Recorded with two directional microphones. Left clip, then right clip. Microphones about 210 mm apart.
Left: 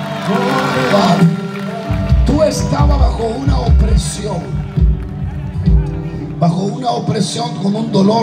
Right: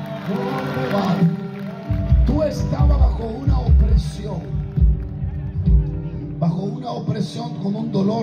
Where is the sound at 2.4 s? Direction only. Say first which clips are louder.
Left 9 dB; 20° left (ahead or behind).